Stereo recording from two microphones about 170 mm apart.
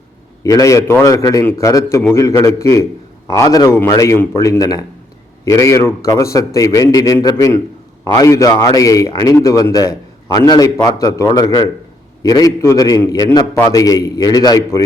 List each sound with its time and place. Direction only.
0.4 s a man's voice: 20° left (ahead or behind)